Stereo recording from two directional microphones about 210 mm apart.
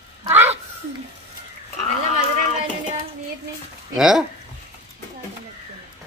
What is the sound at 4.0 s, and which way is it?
Speech, centre (ahead or behind).